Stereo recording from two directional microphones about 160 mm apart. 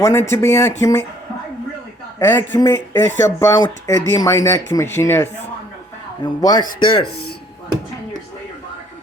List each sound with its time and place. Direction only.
0.0 s speech: 15° left (ahead or behind)
2.1 s a man's voice: 15° left (ahead or behind)
6.2 s speech: 25° left (ahead or behind)